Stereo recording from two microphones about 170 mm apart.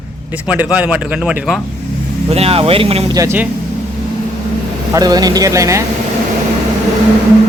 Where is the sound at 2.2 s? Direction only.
35° right (ahead or behind).